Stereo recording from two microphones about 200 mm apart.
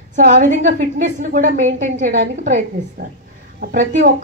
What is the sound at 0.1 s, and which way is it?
Speech, 35° right (ahead or behind).